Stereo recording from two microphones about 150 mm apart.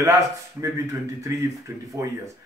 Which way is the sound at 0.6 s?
20° right (ahead or behind).